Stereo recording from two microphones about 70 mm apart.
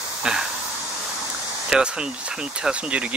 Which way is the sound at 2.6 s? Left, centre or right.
Centre.